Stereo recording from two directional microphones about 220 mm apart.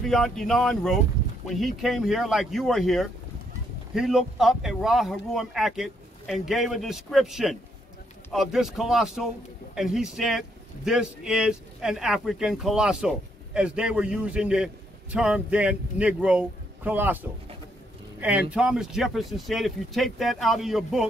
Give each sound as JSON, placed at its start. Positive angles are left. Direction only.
{"t": 0.0, "sound": "a man's voice", "side_deg": 0}
{"t": 18.5, "sound": "a man's voice", "side_deg": -5}